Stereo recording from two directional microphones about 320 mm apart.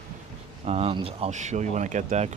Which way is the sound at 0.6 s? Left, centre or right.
Centre.